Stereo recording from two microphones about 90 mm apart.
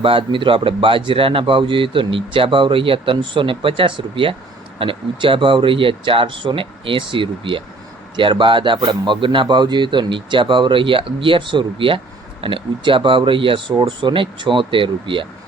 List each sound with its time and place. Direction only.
0.0 s a man's voice: 80° right